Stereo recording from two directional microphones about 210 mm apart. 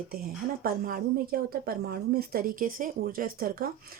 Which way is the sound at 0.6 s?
45° right (ahead or behind).